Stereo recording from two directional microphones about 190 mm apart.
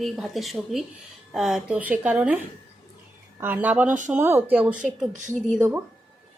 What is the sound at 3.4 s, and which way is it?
A woman's voice, 10° right (ahead or behind).